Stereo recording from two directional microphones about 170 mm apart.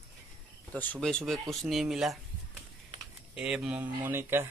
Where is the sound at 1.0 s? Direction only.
Centre (ahead or behind).